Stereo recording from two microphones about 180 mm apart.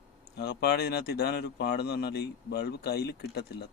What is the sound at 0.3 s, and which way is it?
Speech, 65° left (ahead or behind).